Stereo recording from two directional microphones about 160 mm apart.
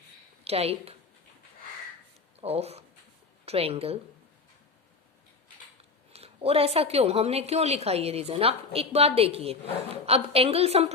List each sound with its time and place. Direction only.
0.4 s a woman's voice: 40° right (ahead or behind)
2.4 s a woman's voice: 40° right (ahead or behind)
6.1 s a woman's voice: 40° right (ahead or behind)